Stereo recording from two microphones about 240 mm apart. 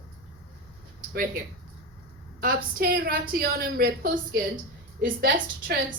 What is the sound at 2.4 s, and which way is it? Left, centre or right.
A woman's voice, right.